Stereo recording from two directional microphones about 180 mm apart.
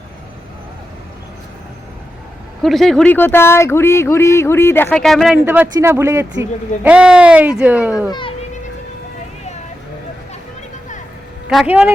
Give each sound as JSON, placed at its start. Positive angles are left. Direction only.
{"t": 2.6, "sound": "speech", "side_deg": 0}
{"t": 4.9, "sound": "speech", "side_deg": 0}
{"t": 8.1, "sound": "children playing", "side_deg": 30}
{"t": 11.4, "sound": "speech", "side_deg": -5}